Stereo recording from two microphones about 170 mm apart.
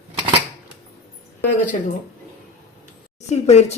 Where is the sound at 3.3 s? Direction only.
40° left (ahead or behind).